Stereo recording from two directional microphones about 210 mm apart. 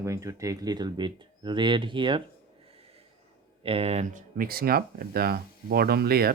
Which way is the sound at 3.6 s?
25° right (ahead or behind).